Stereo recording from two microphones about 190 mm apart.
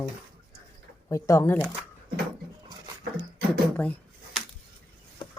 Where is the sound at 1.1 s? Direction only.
15° left (ahead or behind).